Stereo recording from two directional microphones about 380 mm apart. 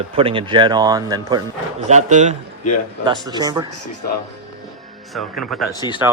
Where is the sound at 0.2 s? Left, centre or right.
Centre.